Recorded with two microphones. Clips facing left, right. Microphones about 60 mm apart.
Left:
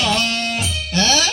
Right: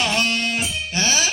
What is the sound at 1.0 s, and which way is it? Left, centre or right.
Music, centre.